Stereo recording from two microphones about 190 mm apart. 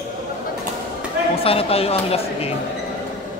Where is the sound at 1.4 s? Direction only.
30° left (ahead or behind).